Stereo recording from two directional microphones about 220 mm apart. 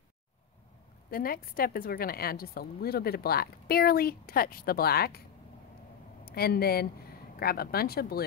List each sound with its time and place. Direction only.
1.1 s a woman's voice: 40° left (ahead or behind)
6.2 s a woman's voice: 45° left (ahead or behind)